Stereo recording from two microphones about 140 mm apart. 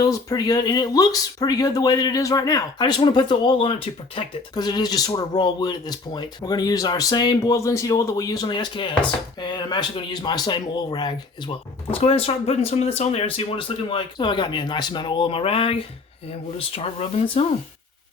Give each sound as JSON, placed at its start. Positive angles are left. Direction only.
{"t": 0.0, "sound": "speech", "side_deg": 25}
{"t": 4.5, "sound": "speech", "side_deg": 30}